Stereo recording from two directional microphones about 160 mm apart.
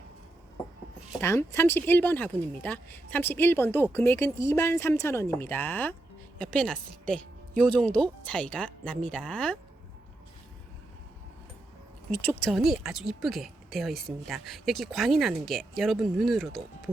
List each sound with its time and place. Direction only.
1.2 s speech: 15° left (ahead or behind)
12.4 s speech: centre (ahead or behind)